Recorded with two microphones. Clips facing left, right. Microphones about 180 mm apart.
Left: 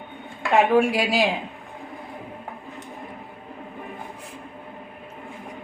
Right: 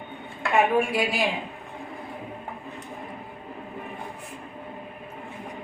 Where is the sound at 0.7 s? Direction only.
90° left.